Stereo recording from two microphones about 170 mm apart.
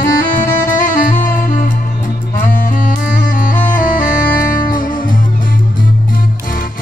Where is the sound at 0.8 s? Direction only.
50° left (ahead or behind).